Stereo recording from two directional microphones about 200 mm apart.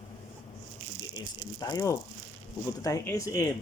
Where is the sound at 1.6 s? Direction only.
15° left (ahead or behind).